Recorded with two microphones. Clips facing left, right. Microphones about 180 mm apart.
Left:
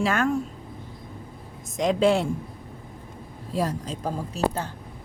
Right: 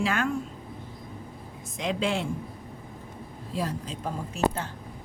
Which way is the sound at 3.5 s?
40° left (ahead or behind).